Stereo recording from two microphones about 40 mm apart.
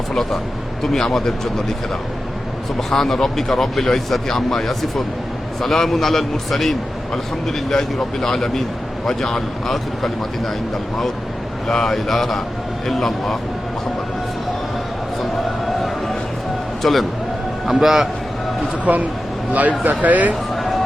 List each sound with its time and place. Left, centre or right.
0.8 s speech: centre
2.9 s speech: centre
11.7 s speech: centre
12.0 s speech: centre
16.8 s a man's voice: centre
18.9 s speech: right
20.5 s music: centre